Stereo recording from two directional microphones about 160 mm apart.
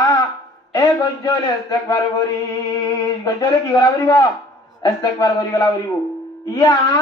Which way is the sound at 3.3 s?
20° left (ahead or behind).